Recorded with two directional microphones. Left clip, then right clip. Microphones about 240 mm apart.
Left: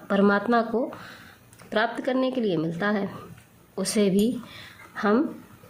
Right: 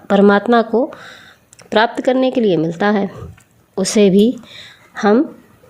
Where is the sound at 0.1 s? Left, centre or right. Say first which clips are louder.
Right 10 dB; right.